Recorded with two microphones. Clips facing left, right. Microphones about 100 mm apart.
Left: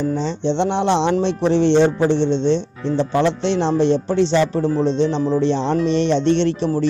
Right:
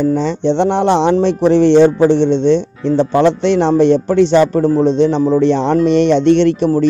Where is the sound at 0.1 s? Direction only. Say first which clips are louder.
Right 6 dB; 55° right (ahead or behind).